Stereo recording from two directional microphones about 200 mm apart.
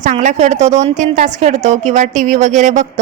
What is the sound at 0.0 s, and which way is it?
A woman's voice, 35° right (ahead or behind).